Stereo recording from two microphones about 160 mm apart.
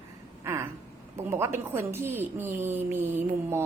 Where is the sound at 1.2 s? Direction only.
15° right (ahead or behind).